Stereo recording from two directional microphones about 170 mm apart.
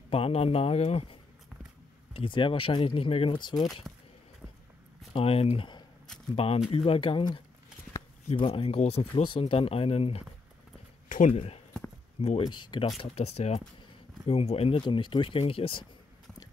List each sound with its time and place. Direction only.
0.1 s speech: 35° left (ahead or behind)
3.9 s a sound: centre (ahead or behind)
5.1 s speech: 35° left (ahead or behind)
11.1 s speech: 50° left (ahead or behind)
11.3 s speech: 35° left (ahead or behind)
12.4 s speech: 25° left (ahead or behind)
13.0 s speech: 35° left (ahead or behind)